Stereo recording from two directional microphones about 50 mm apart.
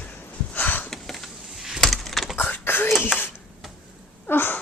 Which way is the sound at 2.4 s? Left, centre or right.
Left.